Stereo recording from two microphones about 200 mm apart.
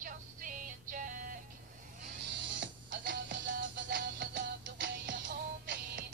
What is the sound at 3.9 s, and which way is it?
Music, 60° right (ahead or behind).